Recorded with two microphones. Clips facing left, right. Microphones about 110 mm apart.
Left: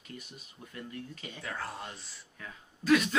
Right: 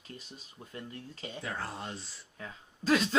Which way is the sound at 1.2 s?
30° right (ahead or behind).